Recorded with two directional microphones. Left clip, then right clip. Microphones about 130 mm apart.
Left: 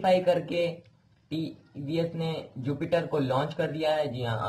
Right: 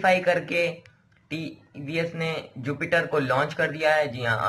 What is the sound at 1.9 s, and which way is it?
A man's voice, 5° left (ahead or behind).